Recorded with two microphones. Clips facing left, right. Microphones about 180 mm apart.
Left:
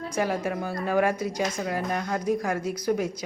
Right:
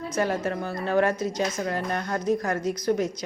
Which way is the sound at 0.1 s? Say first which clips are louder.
Right 1 dB; 10° left (ahead or behind).